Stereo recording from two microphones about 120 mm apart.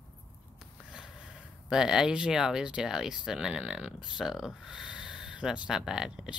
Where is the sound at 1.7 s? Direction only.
5° right (ahead or behind).